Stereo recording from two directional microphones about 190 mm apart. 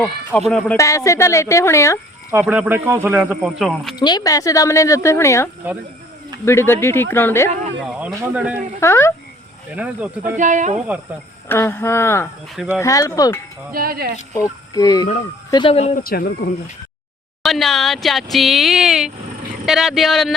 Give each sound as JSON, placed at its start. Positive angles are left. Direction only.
{"t": 0.3, "sound": "speech", "side_deg": 5}
{"t": 0.8, "sound": "speech", "side_deg": 15}
{"t": 2.3, "sound": "a man's voice", "side_deg": -5}
{"t": 3.9, "sound": "speech", "side_deg": 20}
{"t": 7.9, "sound": "a man's voice", "side_deg": -5}
{"t": 8.8, "sound": "speech", "side_deg": 15}
{"t": 9.7, "sound": "a man's voice", "side_deg": -5}
{"t": 10.2, "sound": "speech", "side_deg": -40}
{"t": 11.4, "sound": "speech", "side_deg": 10}
{"t": 13.7, "sound": "speech", "side_deg": -50}
{"t": 14.7, "sound": "speech", "side_deg": 20}
{"t": 16.0, "sound": "speech", "side_deg": 50}
{"t": 17.4, "sound": "speech", "side_deg": 0}